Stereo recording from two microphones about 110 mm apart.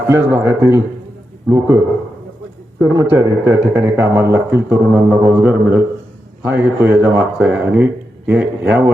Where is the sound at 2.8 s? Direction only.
25° right (ahead or behind).